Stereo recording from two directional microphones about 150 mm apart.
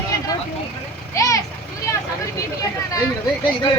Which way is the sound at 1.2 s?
20° left (ahead or behind).